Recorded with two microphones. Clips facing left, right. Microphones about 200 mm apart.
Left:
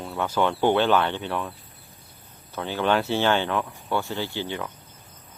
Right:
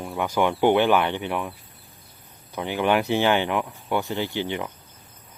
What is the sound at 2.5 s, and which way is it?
Speech, 15° right (ahead or behind).